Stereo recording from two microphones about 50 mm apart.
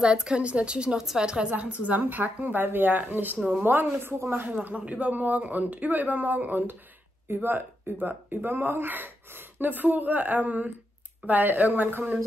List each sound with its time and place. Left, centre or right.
0.0 s a woman's voice: centre; by 4.6 s right
4.6 s speech: right